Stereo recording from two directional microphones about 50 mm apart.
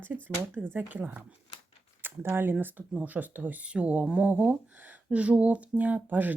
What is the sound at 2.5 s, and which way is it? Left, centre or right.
Speech, right.